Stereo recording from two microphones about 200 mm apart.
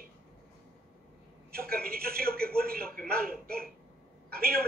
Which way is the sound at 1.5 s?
50° right (ahead or behind).